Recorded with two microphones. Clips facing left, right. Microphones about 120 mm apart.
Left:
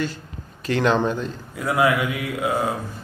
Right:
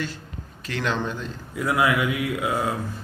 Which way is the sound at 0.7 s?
40° left (ahead or behind).